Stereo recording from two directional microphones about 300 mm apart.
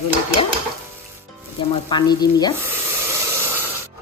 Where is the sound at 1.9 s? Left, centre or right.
Centre.